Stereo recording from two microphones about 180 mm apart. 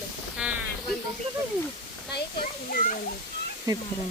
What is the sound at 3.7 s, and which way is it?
Speech, 20° right (ahead or behind).